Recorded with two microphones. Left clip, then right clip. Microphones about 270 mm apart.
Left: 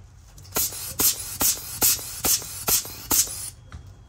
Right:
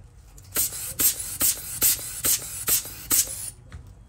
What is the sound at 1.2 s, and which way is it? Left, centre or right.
Spray, left.